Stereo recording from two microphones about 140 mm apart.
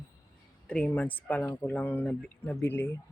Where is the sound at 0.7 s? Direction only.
10° left (ahead or behind).